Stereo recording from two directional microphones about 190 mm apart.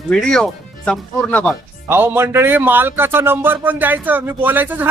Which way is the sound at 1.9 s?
10° right (ahead or behind).